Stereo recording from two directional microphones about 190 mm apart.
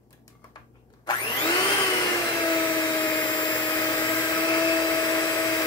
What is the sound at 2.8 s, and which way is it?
Vacuum cleaner, 20° left (ahead or behind).